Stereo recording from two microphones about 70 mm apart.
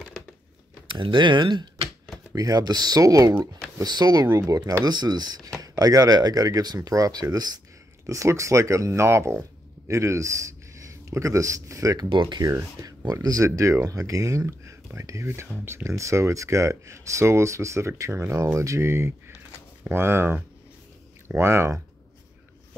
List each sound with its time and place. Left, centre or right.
0.2 s a sound: centre
1.1 s speech: right
2.3 s speech: right
3.8 s speech: right
5.6 s speech: right
8.1 s speech: right
12.8 s speech: right